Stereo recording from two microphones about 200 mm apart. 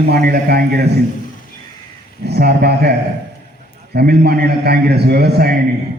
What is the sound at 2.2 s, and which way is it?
Speech, 50° right (ahead or behind).